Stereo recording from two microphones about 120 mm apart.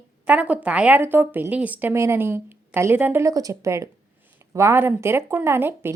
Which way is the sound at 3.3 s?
30° right (ahead or behind).